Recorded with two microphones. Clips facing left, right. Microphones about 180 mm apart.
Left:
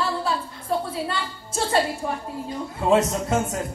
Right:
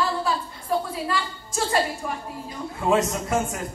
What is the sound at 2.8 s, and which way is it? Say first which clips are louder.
Speech: left 2 dB; 25° left (ahead or behind).